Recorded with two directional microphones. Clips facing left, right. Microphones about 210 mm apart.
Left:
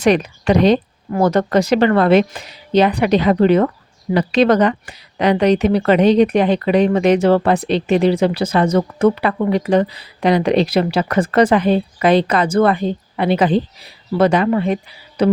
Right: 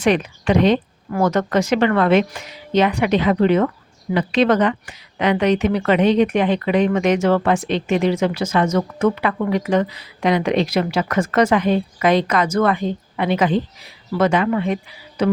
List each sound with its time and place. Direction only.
0.0 s a woman's voice: 40° left (ahead or behind)
15.2 s music: 35° left (ahead or behind)